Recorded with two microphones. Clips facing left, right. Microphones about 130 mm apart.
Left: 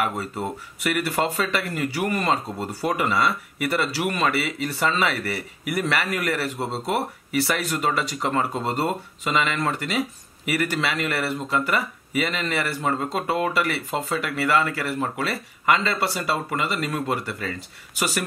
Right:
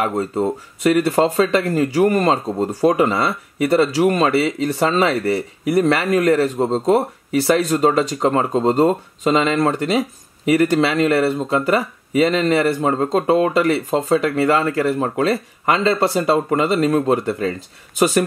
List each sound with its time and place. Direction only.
0.0 s speech: 35° right (ahead or behind)